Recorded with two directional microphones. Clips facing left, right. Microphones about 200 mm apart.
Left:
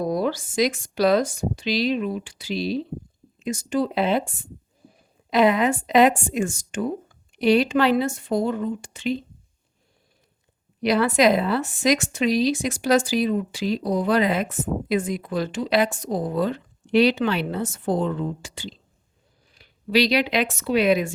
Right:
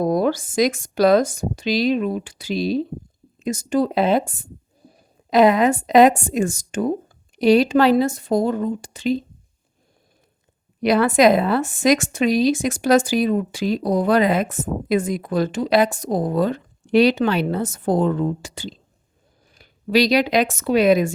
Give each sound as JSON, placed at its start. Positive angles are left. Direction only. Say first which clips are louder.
{"t": 0.0, "sound": "speech", "louder": "right 5 dB", "side_deg": -50}
{"t": 10.8, "sound": "speech", "louder": "right 4 dB", "side_deg": -50}